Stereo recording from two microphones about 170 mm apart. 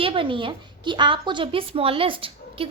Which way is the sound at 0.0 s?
30° right (ahead or behind).